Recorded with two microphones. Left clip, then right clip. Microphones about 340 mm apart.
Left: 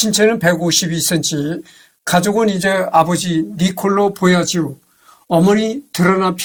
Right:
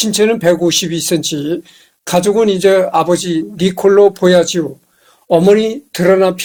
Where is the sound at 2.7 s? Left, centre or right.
Left.